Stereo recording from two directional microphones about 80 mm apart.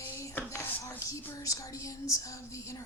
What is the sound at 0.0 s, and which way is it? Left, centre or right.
Speech, left.